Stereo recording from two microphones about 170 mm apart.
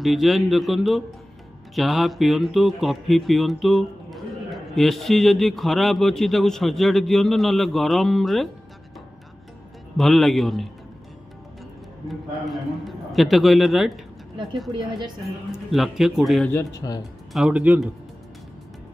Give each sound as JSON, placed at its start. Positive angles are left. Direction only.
{"t": 0.0, "sound": "speech", "side_deg": 0}
{"t": 9.9, "sound": "speech", "side_deg": 0}
{"t": 12.1, "sound": "speech", "side_deg": 0}
{"t": 15.7, "sound": "speech", "side_deg": 0}
{"t": 16.8, "sound": "speech", "side_deg": 20}
{"t": 17.3, "sound": "speech", "side_deg": -5}